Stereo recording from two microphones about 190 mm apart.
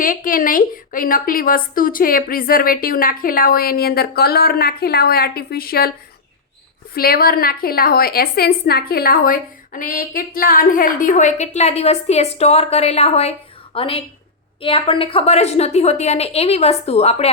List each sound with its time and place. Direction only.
0.0 s a woman's voice: 45° left (ahead or behind)
6.9 s a woman's voice: 50° left (ahead or behind); by 17.2 s 35° left (ahead or behind)